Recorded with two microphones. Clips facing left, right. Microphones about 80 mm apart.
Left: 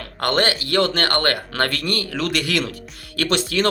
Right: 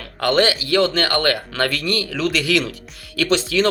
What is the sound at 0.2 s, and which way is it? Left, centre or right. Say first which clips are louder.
Speech: right 3 dB; left.